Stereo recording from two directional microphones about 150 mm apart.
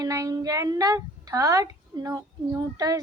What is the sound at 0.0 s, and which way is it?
A child's voice, 20° right (ahead or behind).